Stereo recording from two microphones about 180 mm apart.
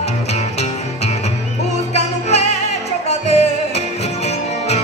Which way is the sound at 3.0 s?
35° left (ahead or behind).